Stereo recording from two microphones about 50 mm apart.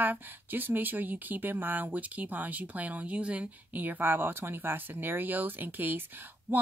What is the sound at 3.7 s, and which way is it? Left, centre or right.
A woman's voice, right.